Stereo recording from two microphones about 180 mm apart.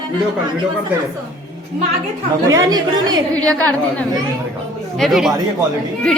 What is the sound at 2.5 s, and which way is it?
Speech, 20° right (ahead or behind).